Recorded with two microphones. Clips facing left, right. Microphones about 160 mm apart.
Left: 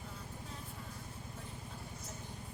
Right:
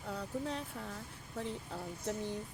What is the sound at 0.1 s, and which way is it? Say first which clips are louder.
Vehicle: right 11 dB; 75° right (ahead or behind).